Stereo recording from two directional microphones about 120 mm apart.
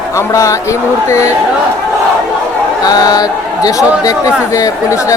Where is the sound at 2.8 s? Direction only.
30° left (ahead or behind).